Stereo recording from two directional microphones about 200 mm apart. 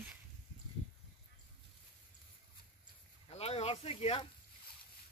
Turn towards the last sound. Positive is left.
turn(degrees=30)  # may be behind; listen again after turning